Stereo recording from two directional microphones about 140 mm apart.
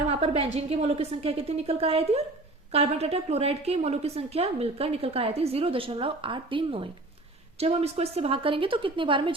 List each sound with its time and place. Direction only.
0.1 s a woman's voice: 45° right (ahead or behind)